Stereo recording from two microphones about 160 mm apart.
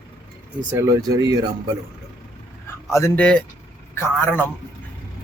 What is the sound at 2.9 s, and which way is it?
Speech, 15° left (ahead or behind).